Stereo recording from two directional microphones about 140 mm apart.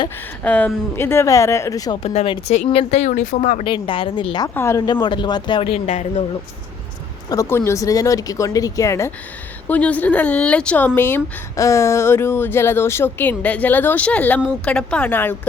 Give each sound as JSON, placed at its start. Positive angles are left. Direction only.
{"t": 0.4, "sound": "speech", "side_deg": 10}
{"t": 2.0, "sound": "speech", "side_deg": 45}
{"t": 3.6, "sound": "speech", "side_deg": 40}
{"t": 4.4, "sound": "speech", "side_deg": 20}
{"t": 4.9, "sound": "speech", "side_deg": 35}
{"t": 7.3, "sound": "speech", "side_deg": 20}